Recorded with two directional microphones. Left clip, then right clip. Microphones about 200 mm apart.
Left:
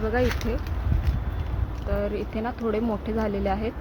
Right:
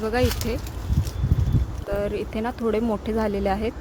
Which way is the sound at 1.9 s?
25° right (ahead or behind).